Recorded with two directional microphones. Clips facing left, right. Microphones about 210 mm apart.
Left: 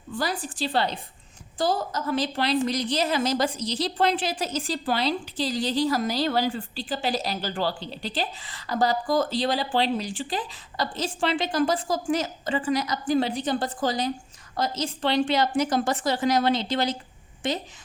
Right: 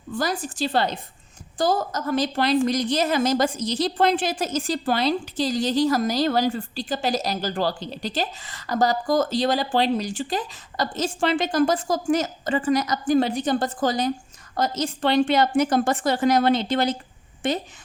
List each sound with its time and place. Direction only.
0.2 s a woman's voice: 45° right (ahead or behind)